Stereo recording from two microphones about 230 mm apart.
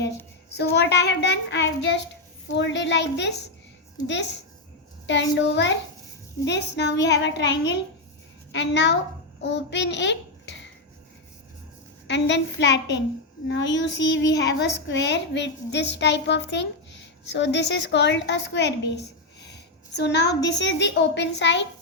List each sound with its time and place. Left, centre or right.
0.5 s a woman's voice: left
12.0 s a woman's voice: left
19.9 s a woman's voice: left